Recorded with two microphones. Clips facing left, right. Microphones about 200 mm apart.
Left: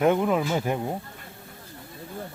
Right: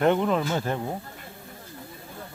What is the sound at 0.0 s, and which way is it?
Speech, 5° left (ahead or behind).